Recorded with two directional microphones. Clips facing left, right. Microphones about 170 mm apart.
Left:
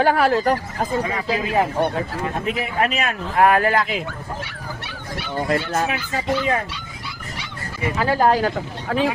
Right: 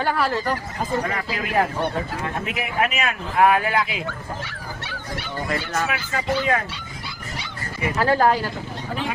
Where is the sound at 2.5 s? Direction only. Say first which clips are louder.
Left 2 dB; 35° left (ahead or behind).